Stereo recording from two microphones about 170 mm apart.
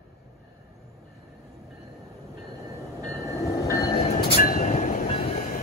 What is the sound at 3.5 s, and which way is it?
Train, 20° left (ahead or behind).